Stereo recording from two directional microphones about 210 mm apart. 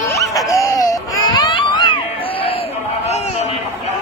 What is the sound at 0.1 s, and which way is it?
Music, 15° left (ahead or behind).